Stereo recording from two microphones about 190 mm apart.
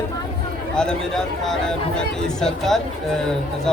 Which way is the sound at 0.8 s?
5° left (ahead or behind).